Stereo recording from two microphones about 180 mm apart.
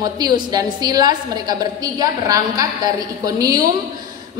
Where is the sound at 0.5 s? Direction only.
20° right (ahead or behind).